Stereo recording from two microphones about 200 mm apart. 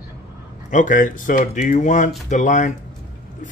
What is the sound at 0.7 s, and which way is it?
Speech, 40° left (ahead or behind).